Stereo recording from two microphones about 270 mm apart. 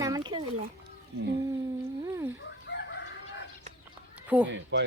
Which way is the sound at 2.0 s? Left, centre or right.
Centre.